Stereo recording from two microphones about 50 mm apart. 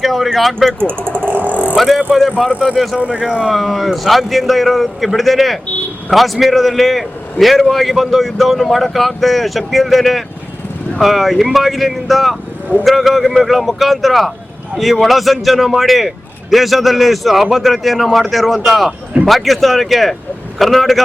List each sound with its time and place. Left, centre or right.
0.0 s a man's voice: centre
0.8 s a sound: right
1.7 s a man's voice: centre
3.0 s speech: right
3.5 s a man's voice: centre